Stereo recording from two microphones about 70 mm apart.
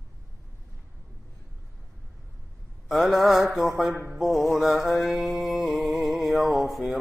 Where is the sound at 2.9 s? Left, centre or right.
Centre.